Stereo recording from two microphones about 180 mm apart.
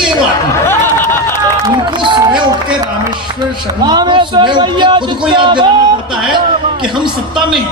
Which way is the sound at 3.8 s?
25° right (ahead or behind).